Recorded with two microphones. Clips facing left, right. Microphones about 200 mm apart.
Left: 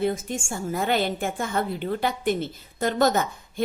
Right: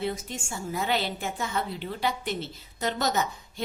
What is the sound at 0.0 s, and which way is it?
A woman's voice, 50° left (ahead or behind).